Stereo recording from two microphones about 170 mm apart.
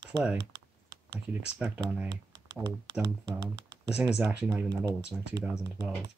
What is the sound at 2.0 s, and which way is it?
Speech, 25° right (ahead or behind).